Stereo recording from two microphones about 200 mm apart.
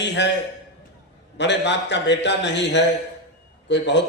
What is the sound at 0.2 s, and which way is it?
Speech, 60° left (ahead or behind).